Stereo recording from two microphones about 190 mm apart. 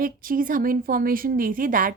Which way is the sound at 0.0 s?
45° right (ahead or behind).